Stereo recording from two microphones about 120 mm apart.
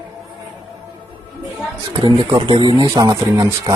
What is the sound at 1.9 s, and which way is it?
Speech, 40° right (ahead or behind).